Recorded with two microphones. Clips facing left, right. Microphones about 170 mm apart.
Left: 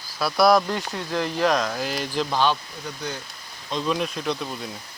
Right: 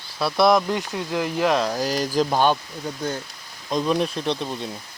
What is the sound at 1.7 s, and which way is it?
Speech, 40° right (ahead or behind).